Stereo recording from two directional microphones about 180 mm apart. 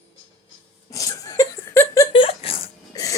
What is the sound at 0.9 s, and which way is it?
Laughter, 20° left (ahead or behind).